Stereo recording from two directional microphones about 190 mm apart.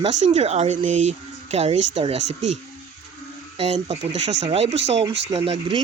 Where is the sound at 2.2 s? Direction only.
75° right (ahead or behind).